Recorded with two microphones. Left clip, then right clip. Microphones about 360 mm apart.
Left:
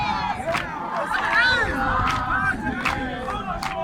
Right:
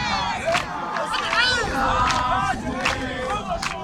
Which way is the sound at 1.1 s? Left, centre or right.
Centre.